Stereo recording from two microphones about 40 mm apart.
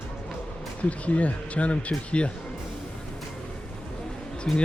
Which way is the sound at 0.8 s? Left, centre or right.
Left.